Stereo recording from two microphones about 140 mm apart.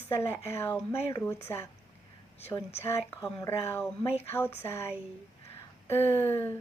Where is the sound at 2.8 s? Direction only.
20° left (ahead or behind).